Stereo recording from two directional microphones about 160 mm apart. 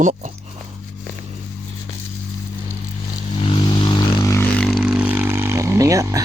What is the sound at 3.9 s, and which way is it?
Vehicle, 25° left (ahead or behind).